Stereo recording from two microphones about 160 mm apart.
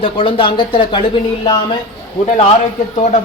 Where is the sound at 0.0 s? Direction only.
35° left (ahead or behind).